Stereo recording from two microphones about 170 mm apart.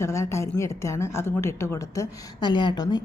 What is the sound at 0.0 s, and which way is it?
A woman's voice, 15° left (ahead or behind).